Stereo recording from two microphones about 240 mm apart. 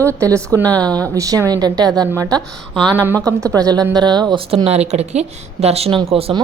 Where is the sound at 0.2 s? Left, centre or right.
Centre.